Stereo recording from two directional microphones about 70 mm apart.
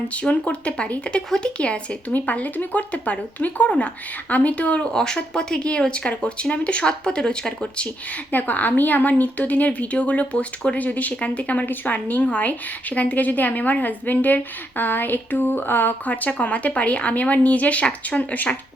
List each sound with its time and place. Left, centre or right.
0.1 s speech: centre
8.3 s a woman's voice: left